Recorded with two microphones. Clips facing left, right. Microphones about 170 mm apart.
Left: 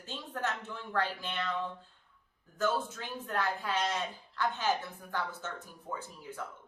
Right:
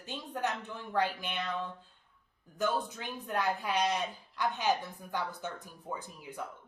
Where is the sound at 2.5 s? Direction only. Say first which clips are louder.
Even; 15° right (ahead or behind).